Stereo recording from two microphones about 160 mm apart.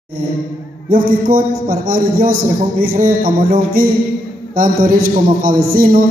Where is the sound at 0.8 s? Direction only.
60° right (ahead or behind).